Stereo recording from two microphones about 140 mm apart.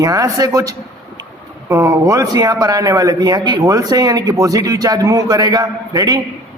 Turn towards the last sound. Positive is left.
turn(degrees=-25)  # may be behind; listen again after turning